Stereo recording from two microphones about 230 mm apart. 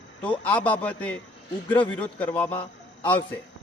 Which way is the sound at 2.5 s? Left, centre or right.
Left.